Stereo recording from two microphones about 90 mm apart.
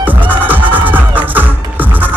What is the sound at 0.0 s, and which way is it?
Music, 20° right (ahead or behind).